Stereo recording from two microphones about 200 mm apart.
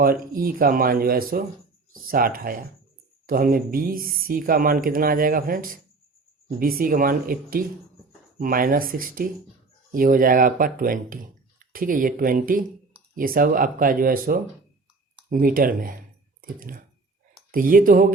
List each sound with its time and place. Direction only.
0.0 s speech: 45° right (ahead or behind)